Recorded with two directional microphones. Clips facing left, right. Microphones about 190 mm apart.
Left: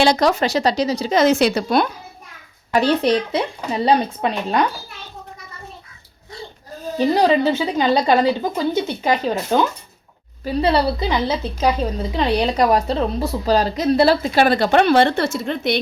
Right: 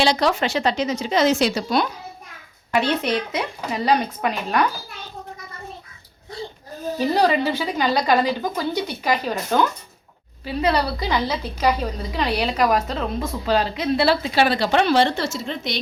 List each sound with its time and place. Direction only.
0.0 s a woman's voice: 45° left (ahead or behind)
1.2 s speech: 60° left (ahead or behind)
2.7 s a woman's voice: 35° left (ahead or behind)
7.1 s a woman's voice: 20° left (ahead or behind)
10.4 s a woman's voice: 30° left (ahead or behind); by 15.8 s 60° left (ahead or behind)